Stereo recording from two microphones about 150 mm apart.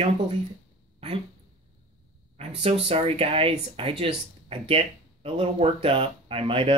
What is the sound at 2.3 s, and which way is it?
Speech, 45° right (ahead or behind).